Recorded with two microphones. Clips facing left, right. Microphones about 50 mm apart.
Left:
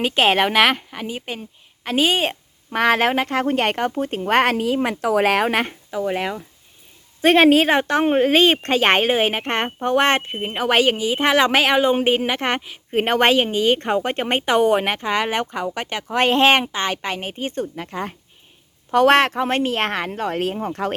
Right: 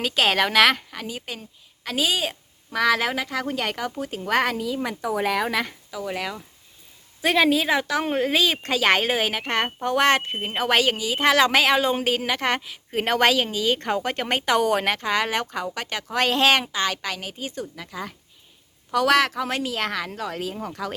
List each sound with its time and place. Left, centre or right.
0.0 s speech: left
1.0 s a woman's voice: left
5.9 s speech: left
7.2 s a woman's voice: left
9.0 s a woman's voice: left
10.4 s speech: centre
10.8 s a woman's voice: left